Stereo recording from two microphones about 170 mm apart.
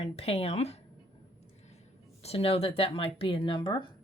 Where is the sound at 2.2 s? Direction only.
35° left (ahead or behind).